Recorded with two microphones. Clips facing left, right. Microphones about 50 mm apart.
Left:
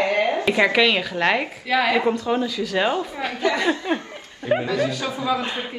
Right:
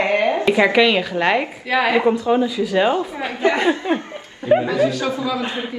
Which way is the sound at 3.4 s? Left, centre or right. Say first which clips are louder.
Right 4 dB; right.